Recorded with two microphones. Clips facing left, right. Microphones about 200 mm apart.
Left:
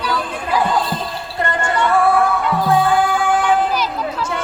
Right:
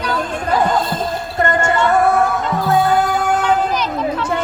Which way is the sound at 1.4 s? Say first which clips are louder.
Right 3 dB; 45° right (ahead or behind).